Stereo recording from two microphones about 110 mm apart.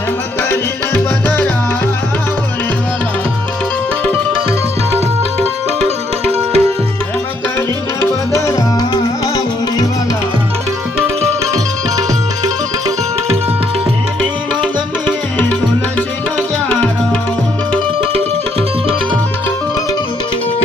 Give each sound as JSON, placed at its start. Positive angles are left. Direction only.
{"t": 0.5, "sound": "music", "side_deg": 15}
{"t": 6.2, "sound": "music", "side_deg": -65}
{"t": 8.4, "sound": "tabla", "side_deg": 30}
{"t": 9.2, "sound": "music", "side_deg": 35}
{"t": 11.2, "sound": "tabla", "side_deg": -35}
{"t": 16.6, "sound": "music", "side_deg": 10}